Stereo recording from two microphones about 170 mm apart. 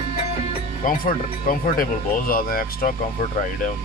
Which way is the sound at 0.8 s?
55° left (ahead or behind).